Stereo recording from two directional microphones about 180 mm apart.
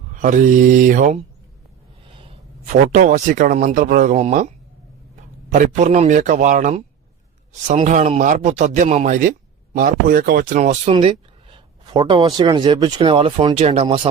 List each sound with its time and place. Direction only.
0.1 s speech: 45° right (ahead or behind)
2.1 s a sound: 30° right (ahead or behind)
2.9 s speech: 45° right (ahead or behind)
5.5 s speech: 40° right (ahead or behind)
9.7 s speech: 50° right (ahead or behind)
10.9 s speech: 30° right (ahead or behind)